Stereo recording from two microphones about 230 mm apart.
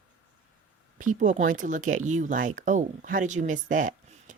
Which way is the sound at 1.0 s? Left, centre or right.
Right.